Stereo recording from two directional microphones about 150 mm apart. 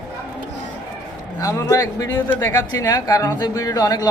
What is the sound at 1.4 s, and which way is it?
A man's voice, 20° left (ahead or behind).